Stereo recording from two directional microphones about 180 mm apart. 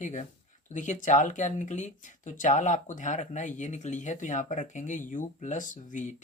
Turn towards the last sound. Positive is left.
turn(degrees=45)  # may be behind; listen again after turning